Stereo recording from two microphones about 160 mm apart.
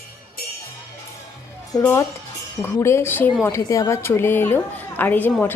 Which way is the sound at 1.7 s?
20° left (ahead or behind).